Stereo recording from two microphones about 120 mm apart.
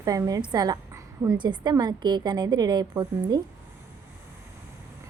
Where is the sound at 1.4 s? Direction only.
35° right (ahead or behind).